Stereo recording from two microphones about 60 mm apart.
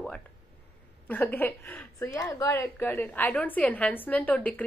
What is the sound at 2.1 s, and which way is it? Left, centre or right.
Speech, left.